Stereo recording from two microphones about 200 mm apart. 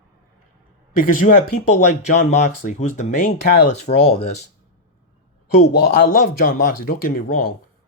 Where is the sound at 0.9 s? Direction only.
40° left (ahead or behind).